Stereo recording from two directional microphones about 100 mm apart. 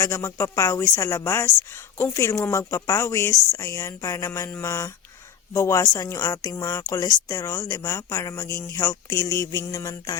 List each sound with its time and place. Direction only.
0.0 s a woman's voice: 30° left (ahead or behind)